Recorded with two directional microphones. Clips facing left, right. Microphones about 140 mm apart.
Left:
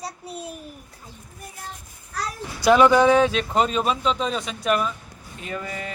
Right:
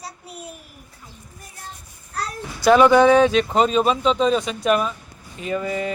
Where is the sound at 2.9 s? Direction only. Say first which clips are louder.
Right 3 dB; 5° left (ahead or behind).